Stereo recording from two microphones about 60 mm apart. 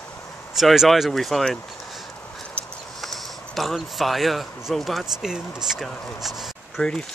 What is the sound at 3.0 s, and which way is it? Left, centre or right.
Speech, centre.